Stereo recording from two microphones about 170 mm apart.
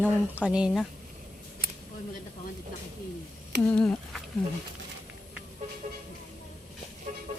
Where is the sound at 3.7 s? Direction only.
5° left (ahead or behind).